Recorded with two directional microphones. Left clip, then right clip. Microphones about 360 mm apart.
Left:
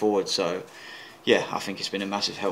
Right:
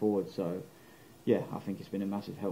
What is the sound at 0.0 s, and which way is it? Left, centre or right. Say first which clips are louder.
Speech: left 8 dB; centre.